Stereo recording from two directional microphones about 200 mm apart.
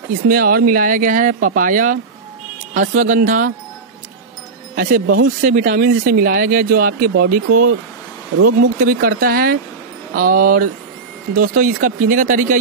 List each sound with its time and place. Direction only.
0.3 s speech: 45° right (ahead or behind)
5.0 s speech: 70° right (ahead or behind)
5.4 s speech: 40° right (ahead or behind)